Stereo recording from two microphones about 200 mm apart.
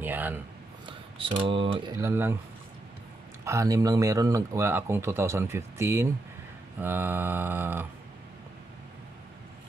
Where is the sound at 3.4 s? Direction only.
15° right (ahead or behind).